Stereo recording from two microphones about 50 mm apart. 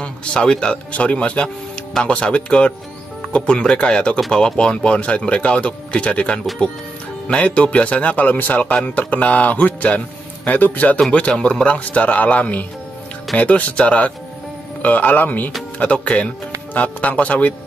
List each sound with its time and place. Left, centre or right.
0.0 s a man's voice: left
15.8 s speech: left